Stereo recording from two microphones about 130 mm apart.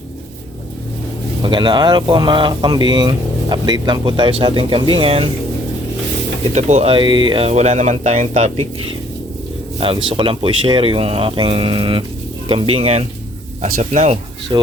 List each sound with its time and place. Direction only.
1.4 s speech: 40° right (ahead or behind)
6.5 s speech: 65° right (ahead or behind); by 7.5 s 40° right (ahead or behind)
7.5 s speech: 60° right (ahead or behind)
9.8 s speech: 45° right (ahead or behind); by 14.2 s 60° right (ahead or behind)
14.5 s speech: 35° right (ahead or behind)